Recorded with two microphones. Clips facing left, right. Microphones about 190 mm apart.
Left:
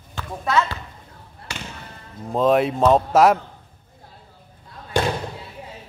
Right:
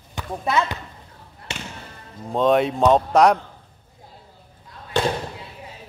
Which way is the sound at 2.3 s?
Centre (ahead or behind).